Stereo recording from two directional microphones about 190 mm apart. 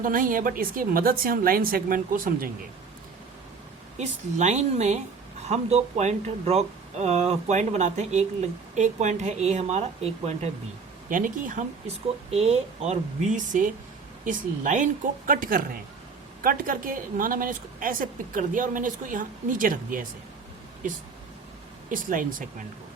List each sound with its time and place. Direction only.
0.0 s speech: 45° right (ahead or behind)
3.9 s speech: 35° right (ahead or behind)
11.1 s speech: 45° right (ahead or behind)
12.3 s speech: 35° right (ahead or behind)
21.8 s speech: 45° right (ahead or behind)